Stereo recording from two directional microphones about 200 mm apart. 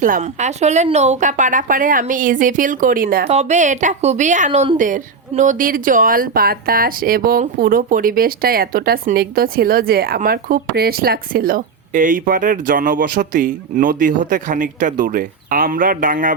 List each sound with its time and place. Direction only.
0.0 s a woman's voice: 40° right (ahead or behind)
3.2 s a woman's voice: 35° right (ahead or behind)